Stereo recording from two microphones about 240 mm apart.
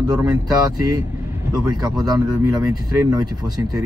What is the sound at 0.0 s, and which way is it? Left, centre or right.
Speech, centre.